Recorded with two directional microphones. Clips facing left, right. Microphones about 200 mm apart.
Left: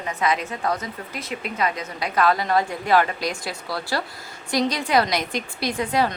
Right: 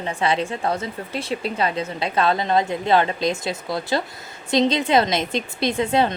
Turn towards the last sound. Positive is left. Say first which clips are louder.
# right 3 dB
turn(degrees=-25)  # may be behind; listen again after turning